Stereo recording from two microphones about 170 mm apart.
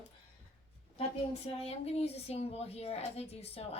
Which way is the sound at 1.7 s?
35° left (ahead or behind).